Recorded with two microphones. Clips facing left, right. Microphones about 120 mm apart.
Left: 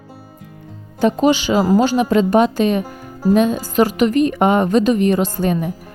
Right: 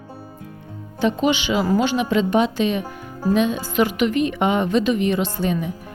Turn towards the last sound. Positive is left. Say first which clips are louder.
# left 4 dB
turn(degrees=45)  # may be behind; listen again after turning